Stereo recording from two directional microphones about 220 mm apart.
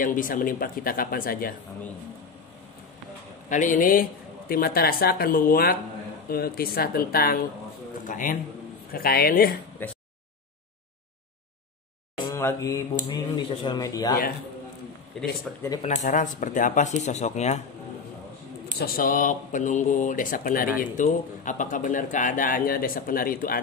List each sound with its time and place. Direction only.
0.0 s speech: 40° left (ahead or behind)
3.4 s a man's voice: 35° left (ahead or behind)
9.8 s speech: 10° left (ahead or behind)
12.3 s mantra: 15° left (ahead or behind)
13.7 s speech: 15° left (ahead or behind)
15.5 s speech: centre (ahead or behind)
15.8 s speech: 30° left (ahead or behind)
18.8 s speech: 40° left (ahead or behind)